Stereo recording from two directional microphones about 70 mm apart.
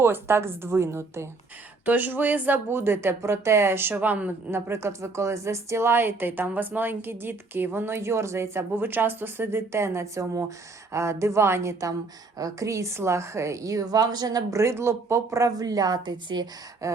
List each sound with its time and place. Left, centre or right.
0.0 s speech: right
1.8 s speech: right
4.5 s a woman's voice: right
14.6 s speech: right
16.8 s a woman's voice: right